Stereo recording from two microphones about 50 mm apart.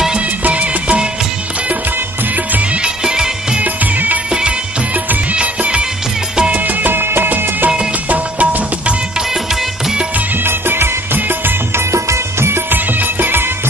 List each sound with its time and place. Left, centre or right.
0.4 s music: right
2.5 s music: right
3.0 s music: centre
3.6 s music: right
4.3 s music: centre
6.7 s music: right
8.1 s music: right
10.4 s music of bollywood: right
11.7 s music: right
12.7 s music: right